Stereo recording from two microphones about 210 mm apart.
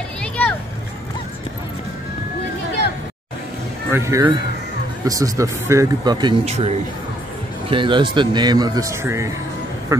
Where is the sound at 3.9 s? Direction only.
10° right (ahead or behind).